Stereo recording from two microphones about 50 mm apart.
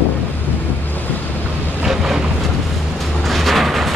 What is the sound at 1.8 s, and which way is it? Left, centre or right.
Vehicle, centre.